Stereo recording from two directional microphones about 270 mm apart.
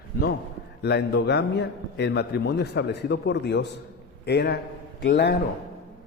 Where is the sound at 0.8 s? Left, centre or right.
Left.